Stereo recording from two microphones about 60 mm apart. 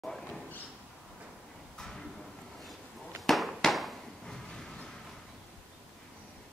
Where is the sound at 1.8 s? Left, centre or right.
Centre.